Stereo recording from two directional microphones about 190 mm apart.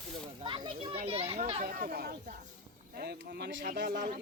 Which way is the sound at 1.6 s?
50° right (ahead or behind).